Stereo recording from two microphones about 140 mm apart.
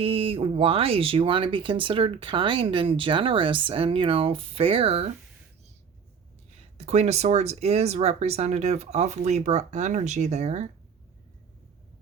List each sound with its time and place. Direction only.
0.0 s speech: 40° right (ahead or behind)
6.7 s speech: 50° right (ahead or behind)